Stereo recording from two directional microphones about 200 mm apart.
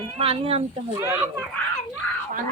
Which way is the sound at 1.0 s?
10° right (ahead or behind).